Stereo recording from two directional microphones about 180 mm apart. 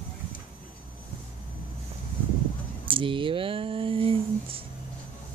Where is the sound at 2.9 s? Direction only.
30° right (ahead or behind).